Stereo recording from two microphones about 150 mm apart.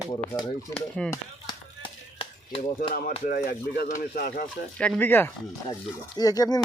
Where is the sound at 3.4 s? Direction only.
90° left; by 4.5 s 65° left (ahead or behind).